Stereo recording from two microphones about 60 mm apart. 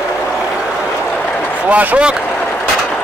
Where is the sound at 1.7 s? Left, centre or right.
Right.